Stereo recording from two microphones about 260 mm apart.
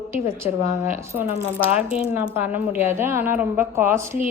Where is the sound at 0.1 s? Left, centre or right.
Centre.